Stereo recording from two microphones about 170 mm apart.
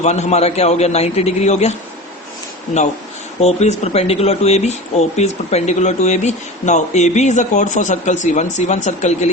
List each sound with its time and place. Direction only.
0.0 s a man's voice: 40° left (ahead or behind)
3.4 s speech: 40° left (ahead or behind)